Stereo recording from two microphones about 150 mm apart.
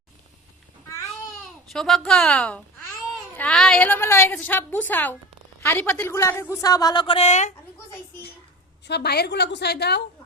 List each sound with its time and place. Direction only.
1.7 s a woman's voice: centre (ahead or behind); by 7.5 s 50° left (ahead or behind)
8.9 s a woman's voice: 90° left